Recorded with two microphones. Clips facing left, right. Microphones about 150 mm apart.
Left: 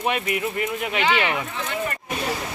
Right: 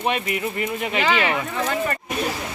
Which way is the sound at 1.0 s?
35° right (ahead or behind).